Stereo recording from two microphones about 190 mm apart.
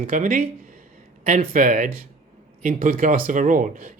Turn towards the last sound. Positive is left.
turn(degrees=-45)  # may be behind; listen again after turning